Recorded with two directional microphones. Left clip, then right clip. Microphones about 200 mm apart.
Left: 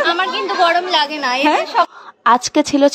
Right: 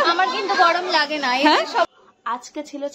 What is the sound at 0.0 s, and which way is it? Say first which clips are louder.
A woman's voice: left 2 dB; centre (ahead or behind).